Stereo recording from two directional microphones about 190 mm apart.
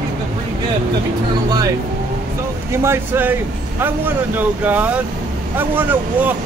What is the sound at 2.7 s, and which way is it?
Speech, 15° right (ahead or behind).